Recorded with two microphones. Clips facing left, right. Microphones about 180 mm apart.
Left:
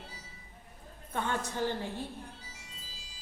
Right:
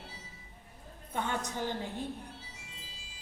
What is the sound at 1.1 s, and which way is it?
Speech, 15° right (ahead or behind).